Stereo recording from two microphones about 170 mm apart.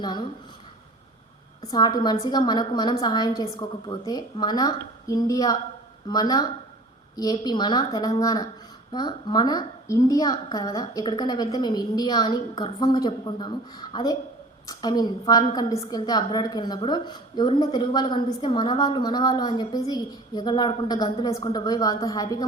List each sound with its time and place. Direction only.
0.0 s a woman's voice: 25° left (ahead or behind)
1.6 s a woman's voice: 25° left (ahead or behind)